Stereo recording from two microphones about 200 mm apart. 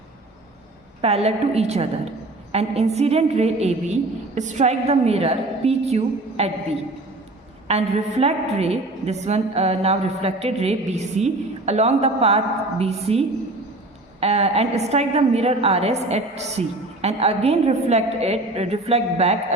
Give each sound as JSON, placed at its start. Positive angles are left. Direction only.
{"t": 1.0, "sound": "a woman's voice", "side_deg": -30}
{"t": 7.7, "sound": "a woman's voice", "side_deg": -30}